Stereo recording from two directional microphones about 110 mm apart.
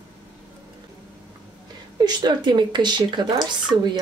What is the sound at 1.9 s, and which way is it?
Speech, 40° right (ahead or behind).